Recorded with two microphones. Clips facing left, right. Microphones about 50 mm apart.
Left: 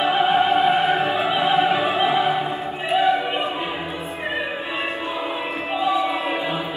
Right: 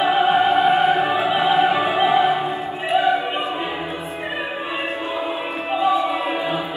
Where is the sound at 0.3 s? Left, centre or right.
Right.